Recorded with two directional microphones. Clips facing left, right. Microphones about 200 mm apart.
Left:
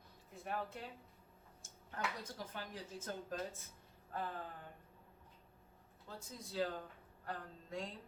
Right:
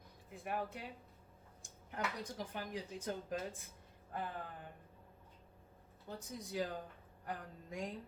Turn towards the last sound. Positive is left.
turn(degrees=-15)  # may be behind; listen again after turning